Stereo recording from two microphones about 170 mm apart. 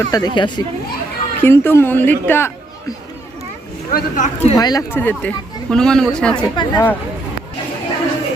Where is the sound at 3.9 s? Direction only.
45° left (ahead or behind).